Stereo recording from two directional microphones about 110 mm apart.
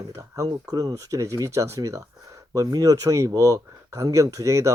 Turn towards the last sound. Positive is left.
turn(degrees=-30)  # may be behind; listen again after turning